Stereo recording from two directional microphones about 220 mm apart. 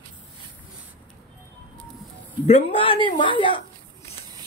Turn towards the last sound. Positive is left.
turn(degrees=20)  # may be behind; listen again after turning